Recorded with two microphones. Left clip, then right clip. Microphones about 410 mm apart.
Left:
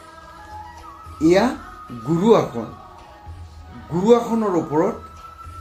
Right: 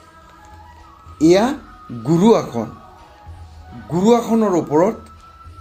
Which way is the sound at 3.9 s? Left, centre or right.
Right.